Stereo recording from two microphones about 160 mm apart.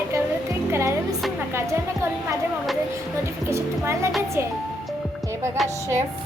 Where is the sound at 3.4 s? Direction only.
15° right (ahead or behind).